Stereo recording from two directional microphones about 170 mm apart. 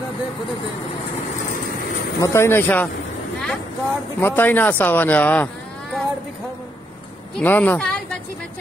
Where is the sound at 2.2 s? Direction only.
15° left (ahead or behind).